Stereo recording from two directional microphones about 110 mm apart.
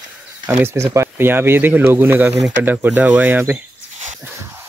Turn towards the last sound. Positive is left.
turn(degrees=-20)  # may be behind; listen again after turning